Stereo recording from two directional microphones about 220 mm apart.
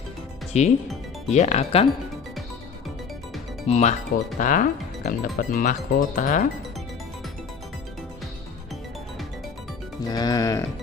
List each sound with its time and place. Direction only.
0.5 s speech: 30° left (ahead or behind)
3.6 s speech: 30° left (ahead or behind)
10.0 s speech: 15° left (ahead or behind)